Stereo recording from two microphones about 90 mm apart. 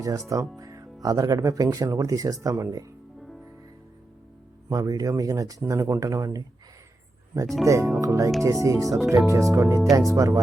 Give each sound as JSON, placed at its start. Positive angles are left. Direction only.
{"t": 0.3, "sound": "music", "side_deg": -35}
{"t": 1.0, "sound": "speech", "side_deg": -40}
{"t": 3.2, "sound": "music", "side_deg": 0}
{"t": 4.7, "sound": "speech", "side_deg": -40}
{"t": 7.6, "sound": "speech", "side_deg": -35}